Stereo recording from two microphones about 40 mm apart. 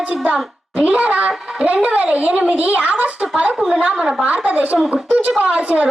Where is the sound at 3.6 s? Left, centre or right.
Centre.